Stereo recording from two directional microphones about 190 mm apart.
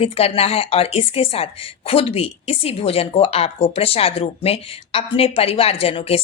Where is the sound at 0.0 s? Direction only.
30° left (ahead or behind).